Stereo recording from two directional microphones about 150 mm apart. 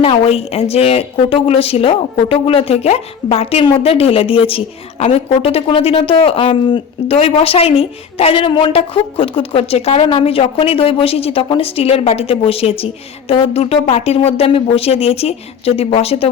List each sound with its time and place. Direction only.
0.0 s a woman's voice: 40° left (ahead or behind)